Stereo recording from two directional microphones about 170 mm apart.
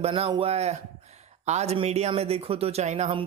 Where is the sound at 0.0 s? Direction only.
35° right (ahead or behind).